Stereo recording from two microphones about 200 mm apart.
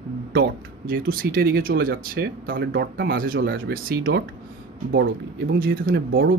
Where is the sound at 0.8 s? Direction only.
45° right (ahead or behind).